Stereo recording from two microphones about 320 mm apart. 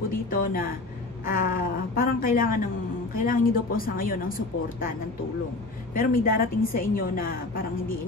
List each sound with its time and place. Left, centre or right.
0.1 s a sound: left
1.2 s a woman's voice: left
5.9 s a woman's voice: left